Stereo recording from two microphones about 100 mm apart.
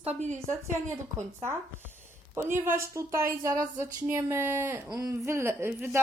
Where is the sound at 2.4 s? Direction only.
25° right (ahead or behind).